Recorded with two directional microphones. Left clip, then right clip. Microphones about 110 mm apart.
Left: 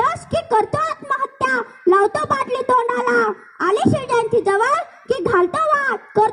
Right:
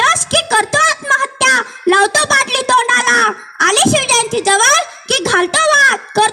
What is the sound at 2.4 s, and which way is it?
A woman's voice, 20° right (ahead or behind).